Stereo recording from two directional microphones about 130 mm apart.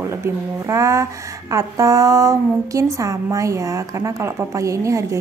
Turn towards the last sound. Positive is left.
turn(degrees=-25)  # may be behind; listen again after turning